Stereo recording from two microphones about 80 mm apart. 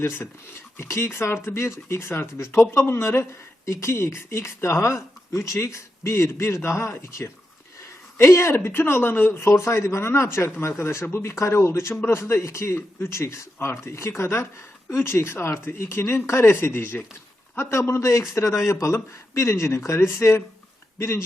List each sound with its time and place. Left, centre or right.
0.8 s speech: left
8.2 s speech: left